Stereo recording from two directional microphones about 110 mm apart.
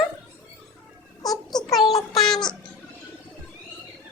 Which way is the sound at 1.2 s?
35° left (ahead or behind).